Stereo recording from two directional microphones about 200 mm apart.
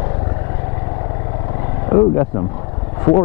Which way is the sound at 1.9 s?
20° left (ahead or behind).